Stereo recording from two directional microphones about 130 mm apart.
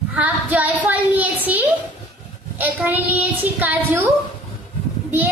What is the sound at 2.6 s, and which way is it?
Speech, 15° right (ahead or behind).